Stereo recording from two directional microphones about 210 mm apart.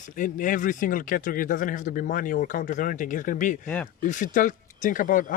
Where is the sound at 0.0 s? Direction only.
40° left (ahead or behind).